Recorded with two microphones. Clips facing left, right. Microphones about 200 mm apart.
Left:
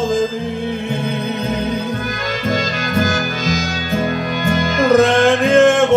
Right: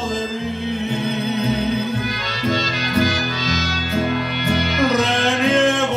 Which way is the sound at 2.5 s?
50° left (ahead or behind).